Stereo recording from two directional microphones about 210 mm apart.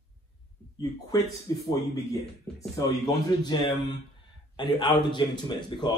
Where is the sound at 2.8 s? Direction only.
20° left (ahead or behind).